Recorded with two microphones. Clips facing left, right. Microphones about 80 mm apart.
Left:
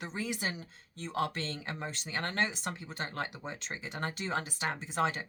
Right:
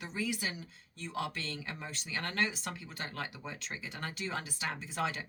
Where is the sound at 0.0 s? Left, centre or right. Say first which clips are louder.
Left 1 dB; left.